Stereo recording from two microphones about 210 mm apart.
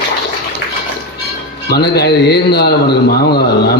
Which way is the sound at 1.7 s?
50° left (ahead or behind).